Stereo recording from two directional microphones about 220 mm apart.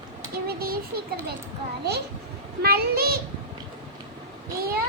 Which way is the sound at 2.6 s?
45° right (ahead or behind).